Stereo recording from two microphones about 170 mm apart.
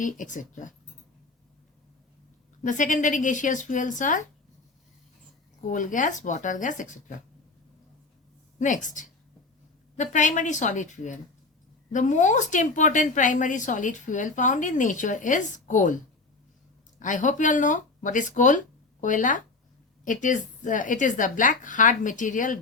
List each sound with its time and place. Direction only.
0.0 s a woman's voice: 50° left (ahead or behind)
2.6 s a woman's voice: 50° left (ahead or behind)
5.7 s a woman's voice: 50° left (ahead or behind)
8.5 s a woman's voice: 45° left (ahead or behind)
17.0 s a woman's voice: 50° left (ahead or behind)